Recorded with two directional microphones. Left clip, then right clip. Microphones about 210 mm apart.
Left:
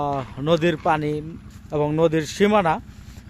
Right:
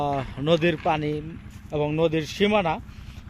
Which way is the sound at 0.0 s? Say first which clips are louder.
Left 1 dB; 5° left (ahead or behind).